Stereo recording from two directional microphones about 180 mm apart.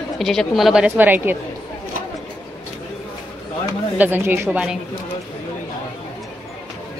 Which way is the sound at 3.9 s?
10° right (ahead or behind).